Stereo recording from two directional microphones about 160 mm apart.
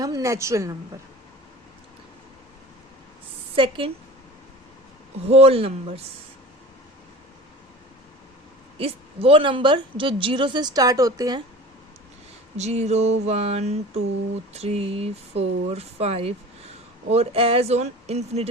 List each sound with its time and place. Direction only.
0.0 s a woman's voice: 20° right (ahead or behind)
3.5 s a woman's voice: 35° right (ahead or behind)
5.2 s a woman's voice: 40° right (ahead or behind)
8.8 s a woman's voice: 35° right (ahead or behind)
12.5 s a sound: 45° right (ahead or behind)
14.5 s a woman's voice: 40° right (ahead or behind)